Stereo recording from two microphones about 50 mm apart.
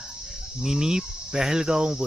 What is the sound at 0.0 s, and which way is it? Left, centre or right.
Cricket, centre.